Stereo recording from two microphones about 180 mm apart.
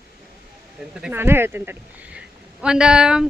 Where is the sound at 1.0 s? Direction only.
10° right (ahead or behind).